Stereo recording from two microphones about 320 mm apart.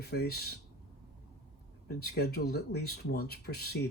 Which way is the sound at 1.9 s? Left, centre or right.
Left.